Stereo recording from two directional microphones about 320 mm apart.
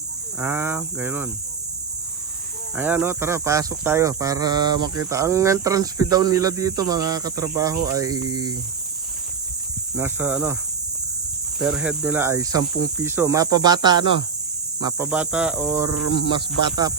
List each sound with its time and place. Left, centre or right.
0.3 s speech: centre
2.7 s speech: centre
9.9 s speech: centre
11.6 s speech: centre